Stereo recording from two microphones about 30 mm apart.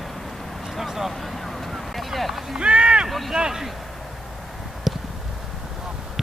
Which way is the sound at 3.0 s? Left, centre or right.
Centre.